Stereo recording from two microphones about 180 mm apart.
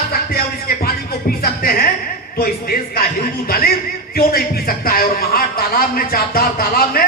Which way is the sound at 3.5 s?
55° left (ahead or behind).